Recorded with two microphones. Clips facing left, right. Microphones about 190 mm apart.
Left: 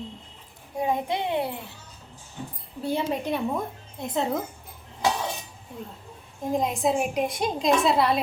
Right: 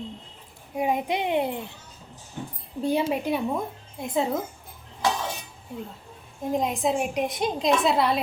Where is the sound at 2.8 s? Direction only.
15° right (ahead or behind).